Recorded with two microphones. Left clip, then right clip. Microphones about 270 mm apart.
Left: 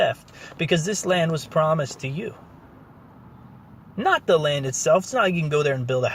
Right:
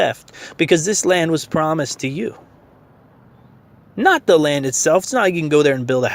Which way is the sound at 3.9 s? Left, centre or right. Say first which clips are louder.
Right 6 dB; right.